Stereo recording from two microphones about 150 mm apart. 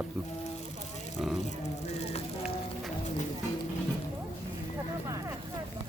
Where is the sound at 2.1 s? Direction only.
45° left (ahead or behind).